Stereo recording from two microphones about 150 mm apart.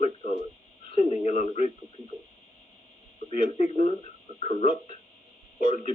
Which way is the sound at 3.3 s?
50° left (ahead or behind).